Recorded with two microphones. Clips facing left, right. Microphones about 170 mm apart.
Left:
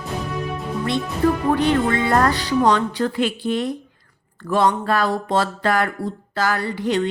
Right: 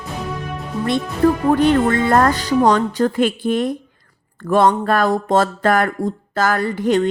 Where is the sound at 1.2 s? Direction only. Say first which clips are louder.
Right 4 dB; 50° right (ahead or behind).